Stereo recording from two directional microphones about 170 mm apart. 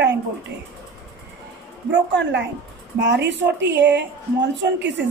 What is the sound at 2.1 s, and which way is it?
A woman's voice, 90° right.